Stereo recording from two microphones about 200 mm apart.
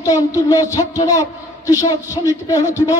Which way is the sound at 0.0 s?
15° left (ahead or behind).